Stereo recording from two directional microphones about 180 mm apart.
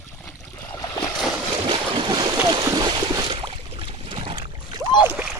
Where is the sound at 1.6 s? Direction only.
25° right (ahead or behind).